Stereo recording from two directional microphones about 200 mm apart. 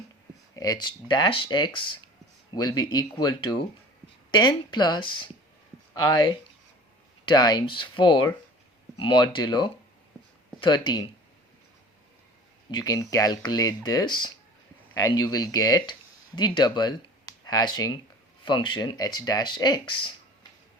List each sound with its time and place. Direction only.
0.5 s speech: 20° left (ahead or behind)
12.7 s speech: 20° left (ahead or behind)